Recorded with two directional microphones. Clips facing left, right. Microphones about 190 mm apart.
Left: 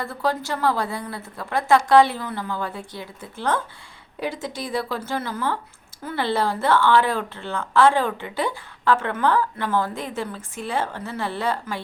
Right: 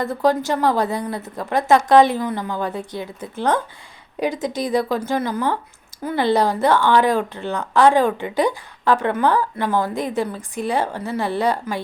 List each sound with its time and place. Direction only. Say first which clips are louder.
0.0 s a woman's voice: right 7 dB; 20° right (ahead or behind)